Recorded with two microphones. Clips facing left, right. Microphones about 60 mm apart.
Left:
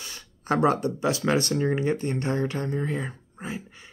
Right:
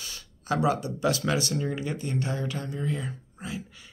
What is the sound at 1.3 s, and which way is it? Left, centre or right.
Speech, left.